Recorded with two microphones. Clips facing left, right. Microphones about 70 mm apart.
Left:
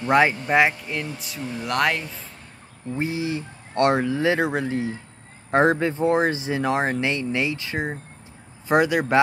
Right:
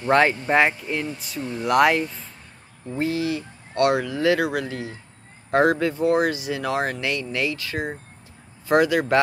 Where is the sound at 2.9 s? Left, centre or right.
Left.